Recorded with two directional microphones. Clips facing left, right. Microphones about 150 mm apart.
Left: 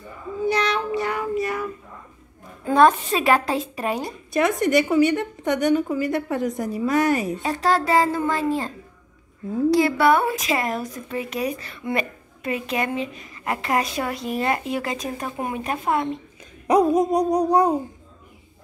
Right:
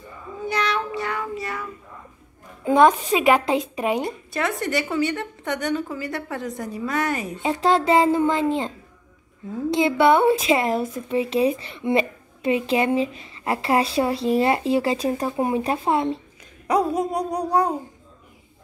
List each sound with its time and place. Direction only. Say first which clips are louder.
0.5 s child singing: left 2 dB; 20° left (ahead or behind)
2.6 s speech: even; 20° right (ahead or behind)
4.3 s a woman's voice: left 8 dB; 15° left (ahead or behind)
7.1 s a woman's voice: left 3 dB; 20° right (ahead or behind)
16.6 s a sound: left 4 dB; 20° left (ahead or behind)